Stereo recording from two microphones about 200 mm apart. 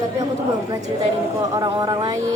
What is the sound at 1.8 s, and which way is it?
Mantra, 20° right (ahead or behind).